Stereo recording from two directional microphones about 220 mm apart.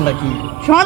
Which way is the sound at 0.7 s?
Centre (ahead or behind).